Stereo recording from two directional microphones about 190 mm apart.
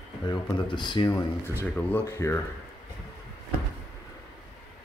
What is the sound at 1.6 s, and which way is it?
Speech, 10° left (ahead or behind).